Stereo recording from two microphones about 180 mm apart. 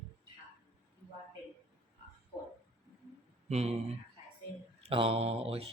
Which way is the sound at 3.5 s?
35° right (ahead or behind).